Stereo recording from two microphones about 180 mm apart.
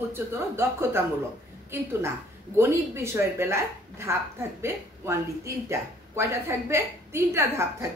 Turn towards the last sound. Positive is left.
turn(degrees=-15)  # may be behind; listen again after turning